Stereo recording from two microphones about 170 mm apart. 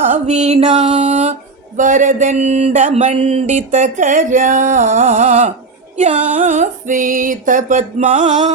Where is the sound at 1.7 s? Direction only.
50° right (ahead or behind).